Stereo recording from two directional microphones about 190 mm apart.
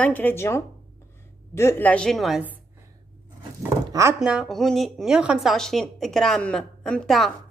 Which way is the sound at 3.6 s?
15° right (ahead or behind).